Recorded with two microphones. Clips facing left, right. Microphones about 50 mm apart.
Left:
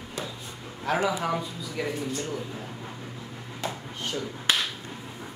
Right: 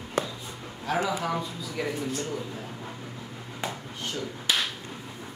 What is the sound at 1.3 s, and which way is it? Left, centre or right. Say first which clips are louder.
Speech: left 1 dB; centre.